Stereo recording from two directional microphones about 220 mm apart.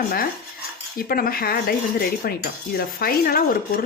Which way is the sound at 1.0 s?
40° left (ahead or behind).